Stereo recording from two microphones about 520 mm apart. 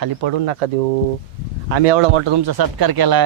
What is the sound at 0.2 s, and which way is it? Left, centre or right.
Speech, right.